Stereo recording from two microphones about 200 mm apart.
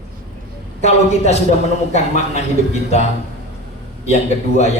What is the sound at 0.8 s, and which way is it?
Speech, 35° left (ahead or behind).